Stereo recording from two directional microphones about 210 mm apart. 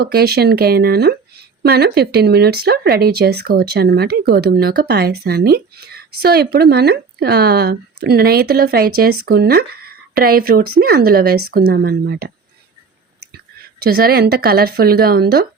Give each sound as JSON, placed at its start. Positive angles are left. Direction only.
{"t": 0.0, "sound": "speech", "side_deg": -50}
{"t": 13.8, "sound": "speech", "side_deg": -45}